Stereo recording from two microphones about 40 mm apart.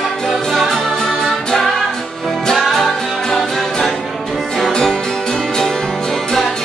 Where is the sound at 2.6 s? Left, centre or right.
Centre.